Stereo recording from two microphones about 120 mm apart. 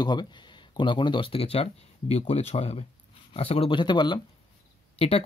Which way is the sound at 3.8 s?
40° left (ahead or behind).